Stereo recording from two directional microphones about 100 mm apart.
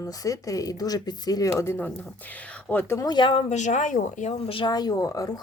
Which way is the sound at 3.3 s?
75° left (ahead or behind).